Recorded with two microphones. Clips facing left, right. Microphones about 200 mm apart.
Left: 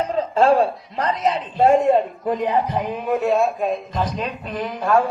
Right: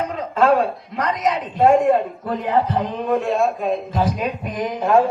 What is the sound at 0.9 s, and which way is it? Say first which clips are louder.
Speech: even; 30° left (ahead or behind).